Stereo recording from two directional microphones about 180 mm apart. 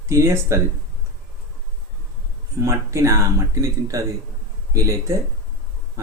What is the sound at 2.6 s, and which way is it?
Speech, 15° right (ahead or behind).